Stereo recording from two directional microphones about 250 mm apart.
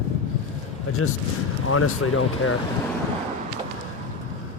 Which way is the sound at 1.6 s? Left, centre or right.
Left.